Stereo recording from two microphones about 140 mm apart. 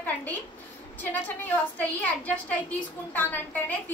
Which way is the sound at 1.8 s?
10° left (ahead or behind).